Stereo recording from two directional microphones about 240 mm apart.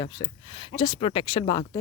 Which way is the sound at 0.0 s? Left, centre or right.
Centre.